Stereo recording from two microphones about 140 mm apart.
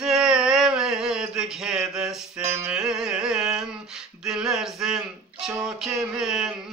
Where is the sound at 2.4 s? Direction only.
15° right (ahead or behind).